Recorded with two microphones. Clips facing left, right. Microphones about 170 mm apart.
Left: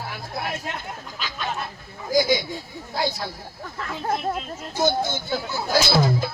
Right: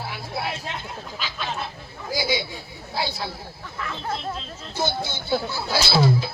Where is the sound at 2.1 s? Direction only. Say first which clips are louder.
Left 6 dB; 45° left (ahead or behind).